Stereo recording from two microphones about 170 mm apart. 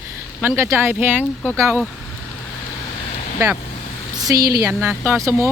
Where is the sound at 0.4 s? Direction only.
15° right (ahead or behind).